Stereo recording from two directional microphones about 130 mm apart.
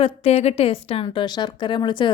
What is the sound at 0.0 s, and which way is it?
A woman's voice, 50° left (ahead or behind).